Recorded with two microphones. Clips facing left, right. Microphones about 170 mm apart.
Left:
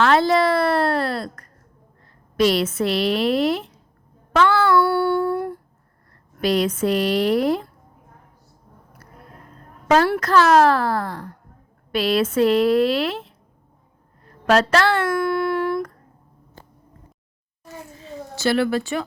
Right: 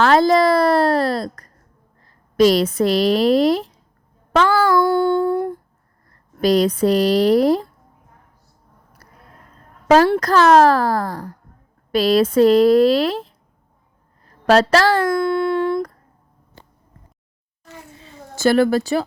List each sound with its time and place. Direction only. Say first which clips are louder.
0.0 s a sound: right 3 dB; 40° right (ahead or behind)
2.4 s speech: right 5 dB; 40° right (ahead or behind)
4.3 s child singing: right 1 dB; 35° right (ahead or behind)
4.8 s a sound: right 3 dB; 20° right (ahead or behind)
6.4 s speech: right 4 dB; 35° right (ahead or behind)
10.2 s speech: right 3 dB; 40° right (ahead or behind)
14.4 s speech: right 3 dB; 35° right (ahead or behind)
15.0 s a sound: right 3 dB; 20° right (ahead or behind)
18.3 s speech: right 5 dB; 45° right (ahead or behind)